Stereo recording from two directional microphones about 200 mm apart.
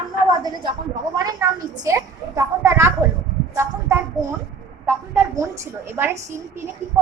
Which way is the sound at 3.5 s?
15° right (ahead or behind).